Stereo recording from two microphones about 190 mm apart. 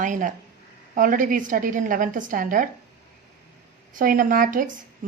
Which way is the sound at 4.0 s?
45° right (ahead or behind).